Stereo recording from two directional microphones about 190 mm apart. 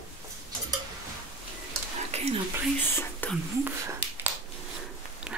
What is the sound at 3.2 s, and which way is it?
Whispering, 10° left (ahead or behind).